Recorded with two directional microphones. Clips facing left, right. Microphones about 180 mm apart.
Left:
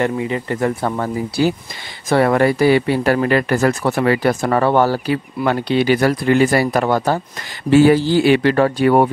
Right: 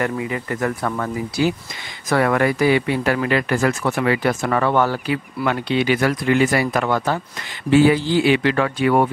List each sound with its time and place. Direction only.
0.0 s speech: 30° left (ahead or behind)